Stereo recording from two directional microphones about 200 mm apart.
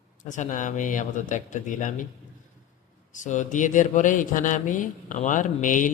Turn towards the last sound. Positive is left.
turn(degrees=40)  # may be behind; listen again after turning